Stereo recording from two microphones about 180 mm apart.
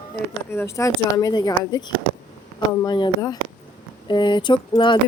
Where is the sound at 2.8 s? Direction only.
25° left (ahead or behind).